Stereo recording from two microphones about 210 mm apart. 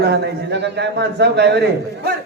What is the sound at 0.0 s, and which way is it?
A man's voice, 50° right (ahead or behind).